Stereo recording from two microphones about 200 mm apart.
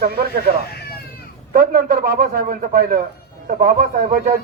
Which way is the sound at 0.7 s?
50° left (ahead or behind).